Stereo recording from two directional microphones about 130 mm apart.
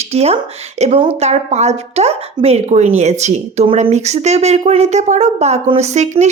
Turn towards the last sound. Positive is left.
turn(degrees=-60)  # may be behind; listen again after turning